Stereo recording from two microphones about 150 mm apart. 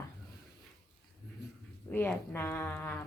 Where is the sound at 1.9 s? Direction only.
10° left (ahead or behind).